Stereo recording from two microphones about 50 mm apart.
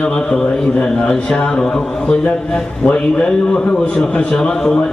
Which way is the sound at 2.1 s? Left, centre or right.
Left.